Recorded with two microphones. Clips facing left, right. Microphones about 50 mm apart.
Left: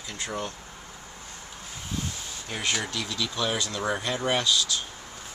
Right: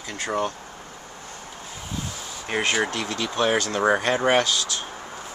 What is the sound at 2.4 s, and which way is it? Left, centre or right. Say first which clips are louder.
Speech: right 7 dB; right.